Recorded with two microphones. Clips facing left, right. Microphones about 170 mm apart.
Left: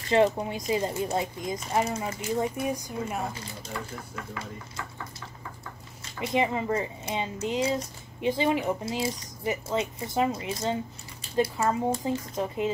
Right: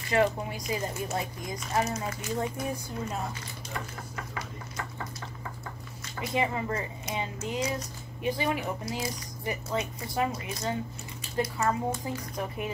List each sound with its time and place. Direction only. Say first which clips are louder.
0.1 s speech: left 4 dB; 25° left (ahead or behind)
6.2 s speech: left 3 dB; 20° left (ahead or behind)